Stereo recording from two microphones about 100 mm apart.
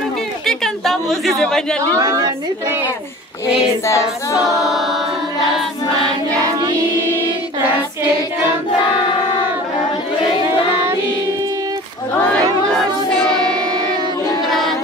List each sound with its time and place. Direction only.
0.5 s a sound: 5° left (ahead or behind)
2.0 s a woman's voice: 35° right (ahead or behind)
3.8 s choir: 30° left (ahead or behind)
4.4 s a capella: 5° right (ahead or behind)
13.3 s singing: 10° left (ahead or behind)